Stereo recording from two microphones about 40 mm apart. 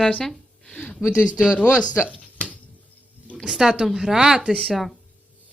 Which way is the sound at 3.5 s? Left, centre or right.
Centre.